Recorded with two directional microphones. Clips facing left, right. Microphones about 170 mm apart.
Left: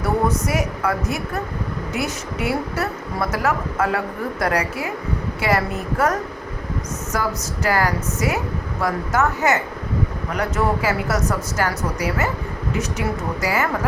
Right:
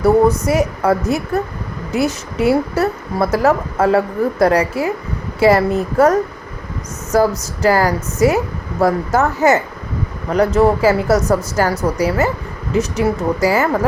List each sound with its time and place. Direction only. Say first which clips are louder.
0.0 s a woman's voice: right 8 dB; 30° right (ahead or behind)